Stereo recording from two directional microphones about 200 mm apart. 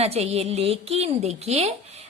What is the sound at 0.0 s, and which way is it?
A woman's voice, 30° right (ahead or behind).